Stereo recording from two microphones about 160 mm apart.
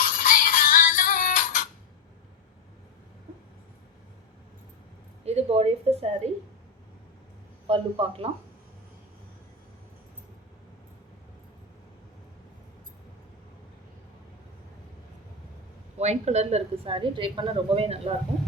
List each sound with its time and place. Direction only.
0.2 s synthetic singing: 60° left (ahead or behind)
5.2 s a woman's voice: 40° right (ahead or behind)
7.7 s a woman's voice: 35° right (ahead or behind)
16.0 s a woman's voice: 45° right (ahead or behind)